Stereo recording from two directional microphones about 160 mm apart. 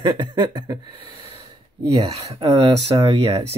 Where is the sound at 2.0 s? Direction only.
40° right (ahead or behind).